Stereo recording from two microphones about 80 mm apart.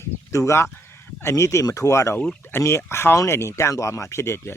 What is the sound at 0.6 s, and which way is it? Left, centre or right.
Speech, left.